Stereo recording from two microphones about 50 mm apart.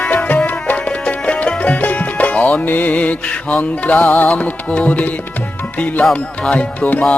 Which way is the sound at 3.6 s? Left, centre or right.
Left.